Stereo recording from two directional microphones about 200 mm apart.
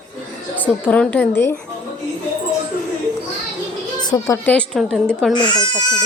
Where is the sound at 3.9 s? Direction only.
20° left (ahead or behind).